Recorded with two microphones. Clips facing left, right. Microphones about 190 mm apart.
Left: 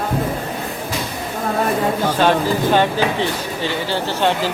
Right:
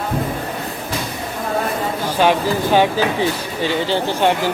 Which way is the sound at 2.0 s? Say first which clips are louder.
Right 2 dB; 10° right (ahead or behind).